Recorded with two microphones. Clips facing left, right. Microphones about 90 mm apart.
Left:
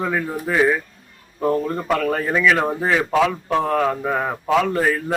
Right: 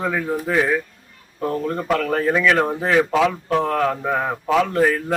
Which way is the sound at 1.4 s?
15° left (ahead or behind).